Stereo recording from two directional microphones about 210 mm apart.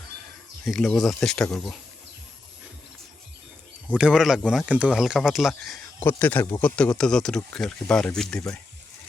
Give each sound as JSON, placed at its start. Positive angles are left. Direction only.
{"t": 0.6, "sound": "speech", "side_deg": 0}
{"t": 3.9, "sound": "speech", "side_deg": -5}